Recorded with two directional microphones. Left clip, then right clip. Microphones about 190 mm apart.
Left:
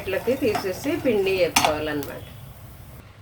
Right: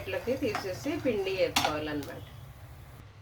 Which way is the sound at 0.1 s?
20° left (ahead or behind).